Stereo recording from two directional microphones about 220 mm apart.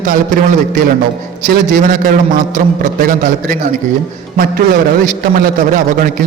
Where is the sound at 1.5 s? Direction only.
40° right (ahead or behind).